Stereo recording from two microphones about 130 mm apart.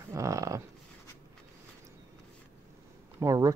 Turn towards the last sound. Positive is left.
turn(degrees=-25)  # may be behind; listen again after turning